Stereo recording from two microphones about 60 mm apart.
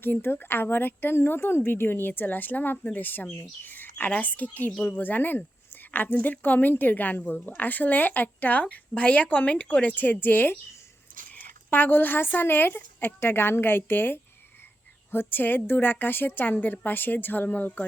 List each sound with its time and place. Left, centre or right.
0.0 s speech: left